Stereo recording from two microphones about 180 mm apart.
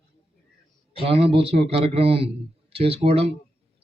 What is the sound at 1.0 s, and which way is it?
A man's voice, 30° right (ahead or behind).